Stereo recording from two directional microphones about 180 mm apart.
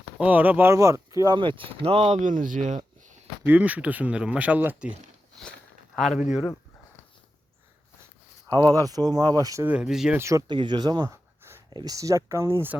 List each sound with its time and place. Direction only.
0.2 s speech: 10° right (ahead or behind); by 2.8 s 45° right (ahead or behind)
3.4 s speech: 10° right (ahead or behind)
6.0 s speech: centre (ahead or behind)
8.7 s speech: 20° right (ahead or behind); by 10.2 s 5° right (ahead or behind)
10.2 s speech: 15° right (ahead or behind)